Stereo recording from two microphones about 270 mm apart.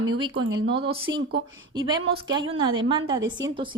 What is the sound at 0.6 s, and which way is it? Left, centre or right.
Speech, centre.